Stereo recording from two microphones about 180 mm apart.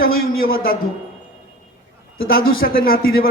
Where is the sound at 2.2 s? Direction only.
55° left (ahead or behind).